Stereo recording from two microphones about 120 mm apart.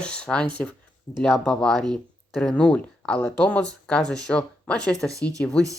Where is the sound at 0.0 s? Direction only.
10° left (ahead or behind).